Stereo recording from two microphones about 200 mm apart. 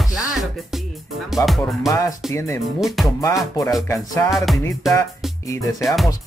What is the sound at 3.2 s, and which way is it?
Music, 15° left (ahead or behind).